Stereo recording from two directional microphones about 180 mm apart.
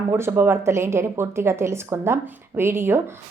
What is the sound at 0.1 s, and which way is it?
A woman's voice, 15° right (ahead or behind).